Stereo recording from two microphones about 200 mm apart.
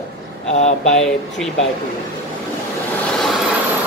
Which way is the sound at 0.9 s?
5° left (ahead or behind).